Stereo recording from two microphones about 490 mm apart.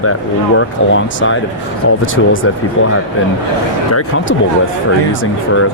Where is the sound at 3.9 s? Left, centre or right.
Left.